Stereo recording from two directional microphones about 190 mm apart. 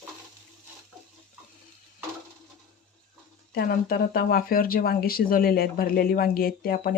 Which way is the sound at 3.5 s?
50° left (ahead or behind).